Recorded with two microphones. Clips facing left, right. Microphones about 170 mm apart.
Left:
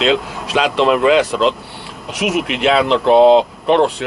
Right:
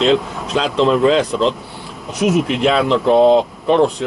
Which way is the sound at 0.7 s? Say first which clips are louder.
Even; 70° left (ahead or behind).